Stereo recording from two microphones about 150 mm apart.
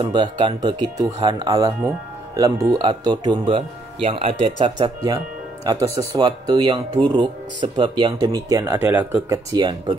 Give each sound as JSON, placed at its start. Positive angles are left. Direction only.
{"t": 0.0, "sound": "speech", "side_deg": -30}
{"t": 9.5, "sound": "speech", "side_deg": -30}